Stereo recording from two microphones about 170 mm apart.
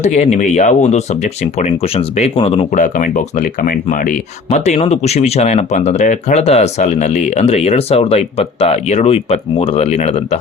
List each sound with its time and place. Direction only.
0.0 s speech: 40° left (ahead or behind)
2.7 s speech: 50° left (ahead or behind)